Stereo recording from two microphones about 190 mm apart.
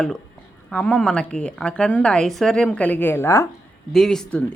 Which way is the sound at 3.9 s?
Centre (ahead or behind).